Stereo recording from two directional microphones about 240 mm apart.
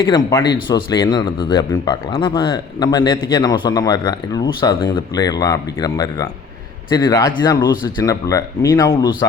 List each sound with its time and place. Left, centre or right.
0.1 s speech: centre